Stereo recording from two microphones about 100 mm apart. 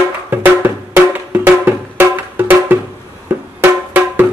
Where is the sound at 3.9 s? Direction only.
15° right (ahead or behind).